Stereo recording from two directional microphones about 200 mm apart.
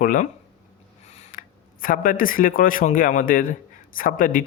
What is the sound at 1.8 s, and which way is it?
Speech, 45° left (ahead or behind).